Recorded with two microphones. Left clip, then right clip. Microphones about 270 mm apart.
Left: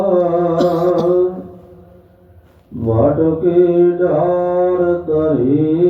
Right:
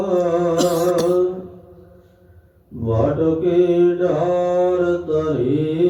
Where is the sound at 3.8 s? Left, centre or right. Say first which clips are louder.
Left 4 dB; right.